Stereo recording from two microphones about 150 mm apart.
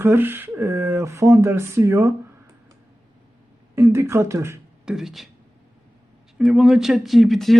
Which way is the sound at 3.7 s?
20° right (ahead or behind).